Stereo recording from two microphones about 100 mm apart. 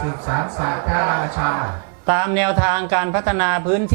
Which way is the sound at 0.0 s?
15° right (ahead or behind).